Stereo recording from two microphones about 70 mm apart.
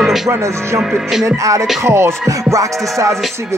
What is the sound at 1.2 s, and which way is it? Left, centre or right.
Music, right.